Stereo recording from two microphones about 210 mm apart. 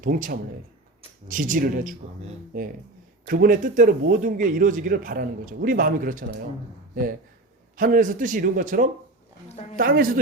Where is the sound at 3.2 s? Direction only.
45° right (ahead or behind).